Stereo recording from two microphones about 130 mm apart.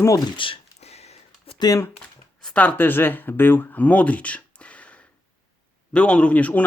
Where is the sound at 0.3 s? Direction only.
45° left (ahead or behind).